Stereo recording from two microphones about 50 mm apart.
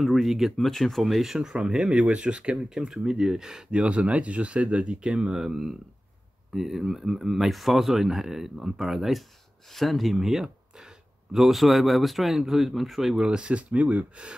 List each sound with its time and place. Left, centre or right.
0.0 s a man's voice: centre
3.8 s speech: right; by 9.2 s centre
9.7 s a man's voice: centre
13.1 s speech: centre